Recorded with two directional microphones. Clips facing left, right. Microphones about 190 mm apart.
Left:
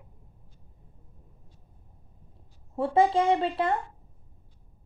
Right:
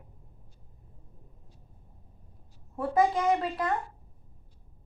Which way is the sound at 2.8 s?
30° left (ahead or behind).